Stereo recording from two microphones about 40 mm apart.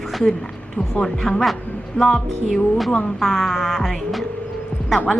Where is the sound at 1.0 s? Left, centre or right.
Centre.